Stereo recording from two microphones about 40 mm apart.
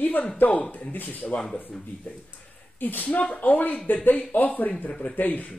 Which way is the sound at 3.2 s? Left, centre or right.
Left.